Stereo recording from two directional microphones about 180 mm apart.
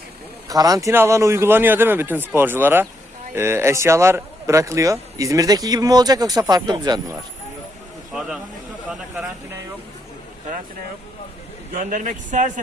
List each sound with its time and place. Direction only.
0.4 s speech: 20° right (ahead or behind)
11.7 s speech: 50° right (ahead or behind)